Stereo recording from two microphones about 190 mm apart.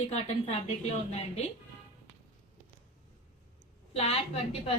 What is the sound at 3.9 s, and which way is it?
Speech, 35° left (ahead or behind).